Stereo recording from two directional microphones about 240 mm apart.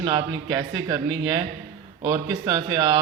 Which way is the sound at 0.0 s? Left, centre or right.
Centre.